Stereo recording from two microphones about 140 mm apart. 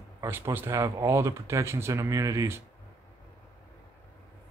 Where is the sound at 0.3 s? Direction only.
15° right (ahead or behind).